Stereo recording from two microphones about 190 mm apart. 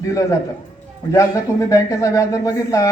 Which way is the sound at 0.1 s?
15° left (ahead or behind).